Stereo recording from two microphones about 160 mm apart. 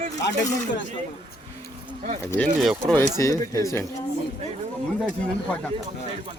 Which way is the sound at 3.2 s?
20° left (ahead or behind).